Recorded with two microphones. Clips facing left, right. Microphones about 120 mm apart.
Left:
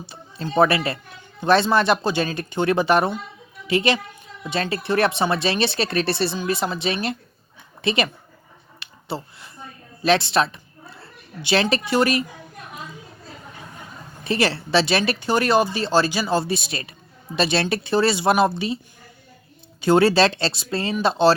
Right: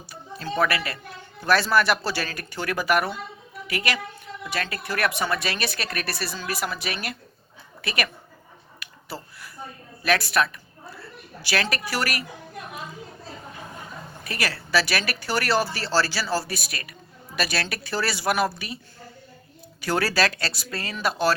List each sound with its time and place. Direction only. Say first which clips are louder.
0.0 s a woman's voice: left 3 dB; 25° left (ahead or behind)
8.8 s a sound: left 7 dB; 25° left (ahead or behind)
10.0 s a woman's voice: left 4 dB; 25° left (ahead or behind)
14.3 s speech: left 8 dB; 25° left (ahead or behind)
19.8 s speech: left 8 dB; 25° left (ahead or behind)